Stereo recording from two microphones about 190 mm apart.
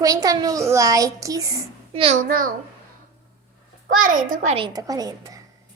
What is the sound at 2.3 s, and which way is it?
Speech, 45° right (ahead or behind).